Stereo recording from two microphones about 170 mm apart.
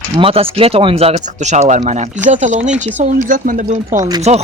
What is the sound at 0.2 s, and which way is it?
Speech, 35° right (ahead or behind).